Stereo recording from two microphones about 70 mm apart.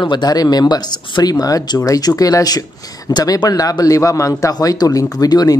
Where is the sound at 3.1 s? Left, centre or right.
Left.